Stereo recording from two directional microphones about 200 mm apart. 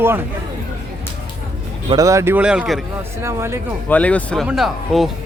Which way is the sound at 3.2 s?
15° right (ahead or behind).